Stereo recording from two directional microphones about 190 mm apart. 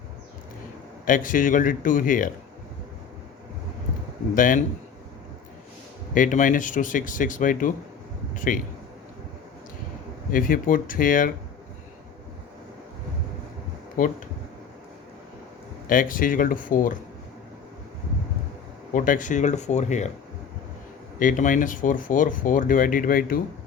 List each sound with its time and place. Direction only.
1.0 s speech: 45° left (ahead or behind)
4.4 s speech: 45° left (ahead or behind)
6.1 s speech: 45° left (ahead or behind)
10.3 s speech: 45° left (ahead or behind)
15.9 s speech: 45° left (ahead or behind)
18.9 s speech: 45° left (ahead or behind)
21.2 s speech: 45° left (ahead or behind)